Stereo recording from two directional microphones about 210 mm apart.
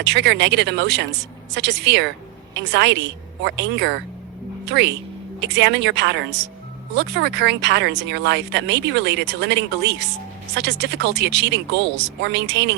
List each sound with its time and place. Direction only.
0.0 s speech: 55° right (ahead or behind)